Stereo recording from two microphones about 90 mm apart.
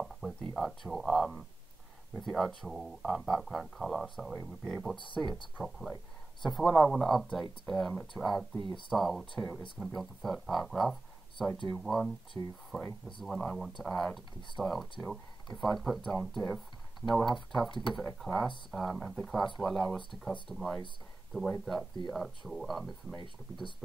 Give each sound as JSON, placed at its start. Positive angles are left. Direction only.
{"t": 0.0, "sound": "a sound", "side_deg": 0}
{"t": 0.6, "sound": "speech", "side_deg": 0}
{"t": 8.5, "sound": "speech", "side_deg": 60}
{"t": 8.9, "sound": "speech", "side_deg": 0}
{"t": 12.4, "sound": "speech", "side_deg": 35}
{"t": 12.7, "sound": "speech", "side_deg": 5}